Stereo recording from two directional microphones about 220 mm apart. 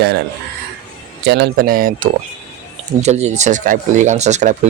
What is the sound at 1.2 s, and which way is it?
Speech, 50° right (ahead or behind).